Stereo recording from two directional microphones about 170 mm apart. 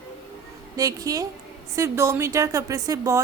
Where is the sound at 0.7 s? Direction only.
20° right (ahead or behind).